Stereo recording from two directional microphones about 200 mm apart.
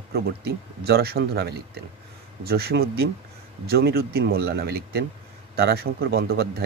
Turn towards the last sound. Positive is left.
turn(degrees=-50)  # may be behind; listen again after turning